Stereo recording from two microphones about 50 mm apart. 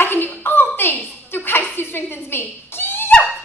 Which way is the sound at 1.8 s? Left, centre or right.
Left.